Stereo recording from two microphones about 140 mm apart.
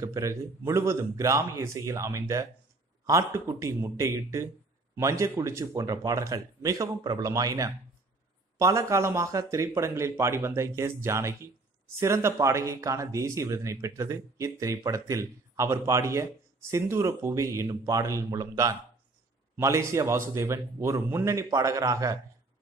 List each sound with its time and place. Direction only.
0.0 s speech: 20° right (ahead or behind)